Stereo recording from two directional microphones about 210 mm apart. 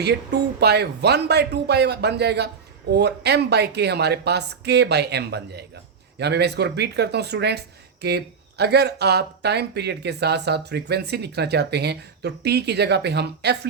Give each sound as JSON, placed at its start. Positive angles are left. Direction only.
{"t": 0.0, "sound": "speech", "side_deg": -50}